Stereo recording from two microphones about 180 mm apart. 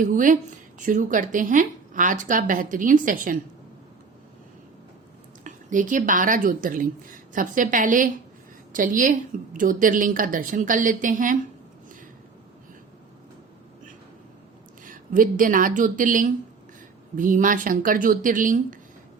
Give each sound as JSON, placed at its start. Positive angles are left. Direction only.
{"t": 0.0, "sound": "a woman's voice", "side_deg": -45}
{"t": 5.4, "sound": "a woman's voice", "side_deg": -45}
{"t": 14.8, "sound": "a woman's voice", "side_deg": -50}